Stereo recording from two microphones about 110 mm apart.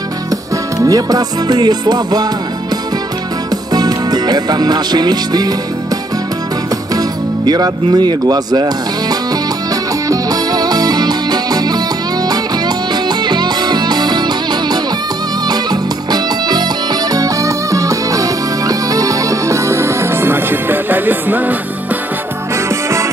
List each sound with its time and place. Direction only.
0.7 s music: 35° right (ahead or behind)
3.7 s music: 40° right (ahead or behind)
6.9 s music: 35° right (ahead or behind); by 21.5 s 15° right (ahead or behind)
22.7 s music: 25° right (ahead or behind)